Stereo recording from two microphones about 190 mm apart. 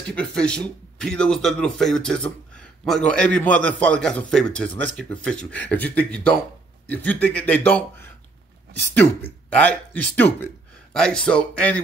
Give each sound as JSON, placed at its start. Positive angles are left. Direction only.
{"t": 0.1, "sound": "a man's voice", "side_deg": 5}